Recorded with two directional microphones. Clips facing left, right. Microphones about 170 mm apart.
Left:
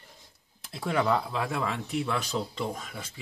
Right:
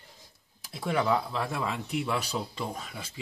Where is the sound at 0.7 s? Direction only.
Centre (ahead or behind).